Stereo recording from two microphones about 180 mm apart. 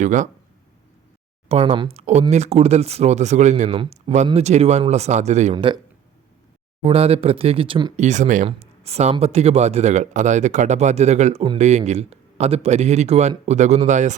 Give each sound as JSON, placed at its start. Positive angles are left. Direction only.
{"t": 0.0, "sound": "speech", "side_deg": -45}
{"t": 1.5, "sound": "speech", "side_deg": -35}
{"t": 6.8, "sound": "speech", "side_deg": -35}
{"t": 7.9, "sound": "speech", "side_deg": -40}